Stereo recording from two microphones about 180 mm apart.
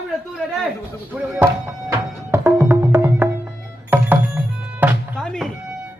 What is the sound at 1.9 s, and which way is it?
Music, 15° right (ahead or behind).